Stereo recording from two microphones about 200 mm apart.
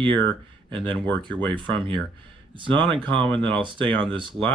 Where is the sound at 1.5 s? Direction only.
25° right (ahead or behind).